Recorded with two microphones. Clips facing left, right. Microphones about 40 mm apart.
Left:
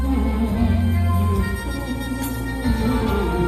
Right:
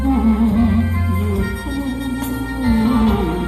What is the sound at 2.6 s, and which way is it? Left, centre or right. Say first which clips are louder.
Music: right 7 dB; right.